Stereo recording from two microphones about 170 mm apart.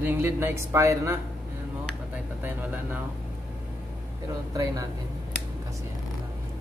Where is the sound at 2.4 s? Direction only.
10° right (ahead or behind).